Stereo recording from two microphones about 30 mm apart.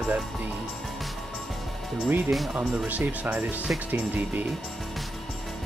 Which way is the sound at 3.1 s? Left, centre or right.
Right.